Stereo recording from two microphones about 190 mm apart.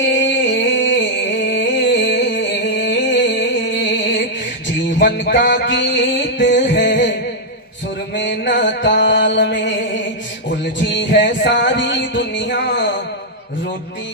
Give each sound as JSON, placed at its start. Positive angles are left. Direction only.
{"t": 0.2, "sound": "music", "side_deg": 70}
{"t": 8.1, "sound": "mantra", "side_deg": 65}
{"t": 9.6, "sound": "music", "side_deg": 70}
{"t": 11.1, "sound": "a sound", "side_deg": 65}